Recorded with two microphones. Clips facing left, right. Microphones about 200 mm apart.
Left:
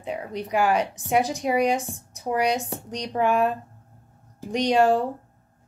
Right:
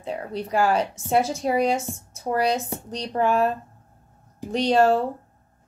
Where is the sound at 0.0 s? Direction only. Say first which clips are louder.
Right 1 dB; 15° left (ahead or behind).